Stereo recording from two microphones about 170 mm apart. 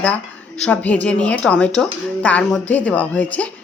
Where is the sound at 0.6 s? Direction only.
10° left (ahead or behind).